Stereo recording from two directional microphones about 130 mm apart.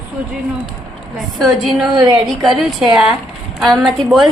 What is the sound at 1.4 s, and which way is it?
Speech, centre (ahead or behind).